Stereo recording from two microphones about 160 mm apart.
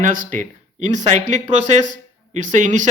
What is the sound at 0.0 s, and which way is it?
Speech, 55° right (ahead or behind).